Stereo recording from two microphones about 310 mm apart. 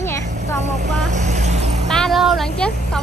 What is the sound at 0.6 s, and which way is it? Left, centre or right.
Speech, right.